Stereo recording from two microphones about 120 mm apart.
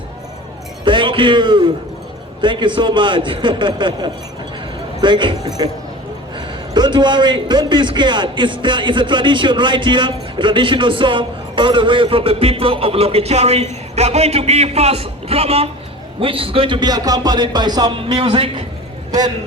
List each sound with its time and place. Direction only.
0.9 s a man's voice: 45° right (ahead or behind)
18.1 s a man's voice: 45° right (ahead or behind)